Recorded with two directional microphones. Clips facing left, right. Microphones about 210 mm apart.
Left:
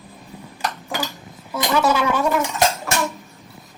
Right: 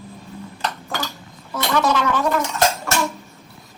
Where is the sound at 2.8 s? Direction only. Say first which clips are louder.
Right 1 dB; centre (ahead or behind).